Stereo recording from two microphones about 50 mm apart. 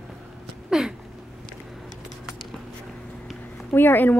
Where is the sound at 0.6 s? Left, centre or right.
Centre.